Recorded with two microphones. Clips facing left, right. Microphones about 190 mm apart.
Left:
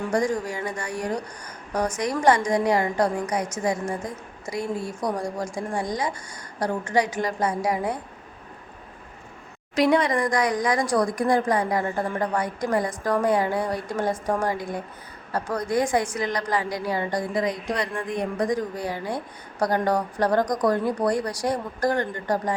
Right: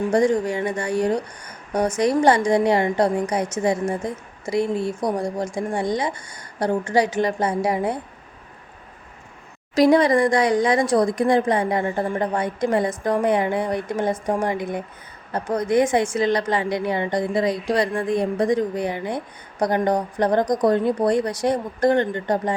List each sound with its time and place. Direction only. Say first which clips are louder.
0.1 s a woman's voice: right 5 dB; 25° right (ahead or behind)
9.7 s a woman's voice: right 5 dB; 35° right (ahead or behind)